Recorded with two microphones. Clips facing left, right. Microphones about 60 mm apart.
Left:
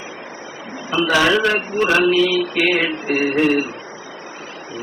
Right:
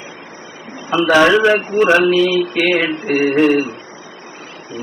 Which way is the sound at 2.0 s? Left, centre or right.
Right.